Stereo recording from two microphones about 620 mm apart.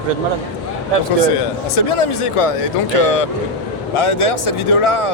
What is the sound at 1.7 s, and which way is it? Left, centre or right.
Speech, left.